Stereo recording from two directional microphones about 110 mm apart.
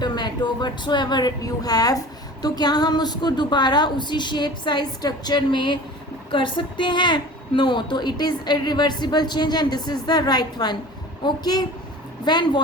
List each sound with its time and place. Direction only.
0.0 s a woman's voice: 40° left (ahead or behind)